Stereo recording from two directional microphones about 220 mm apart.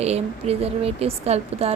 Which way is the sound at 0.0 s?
30° right (ahead or behind).